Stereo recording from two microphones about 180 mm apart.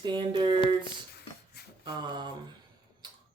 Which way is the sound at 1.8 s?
25° right (ahead or behind).